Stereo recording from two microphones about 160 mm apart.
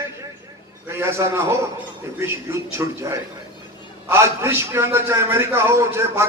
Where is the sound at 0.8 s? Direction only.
15° right (ahead or behind).